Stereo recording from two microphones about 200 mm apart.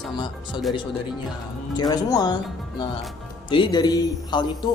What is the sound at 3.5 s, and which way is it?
Speech, 25° left (ahead or behind).